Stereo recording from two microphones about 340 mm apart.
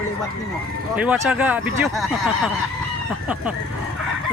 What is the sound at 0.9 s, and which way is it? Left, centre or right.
Speech, centre.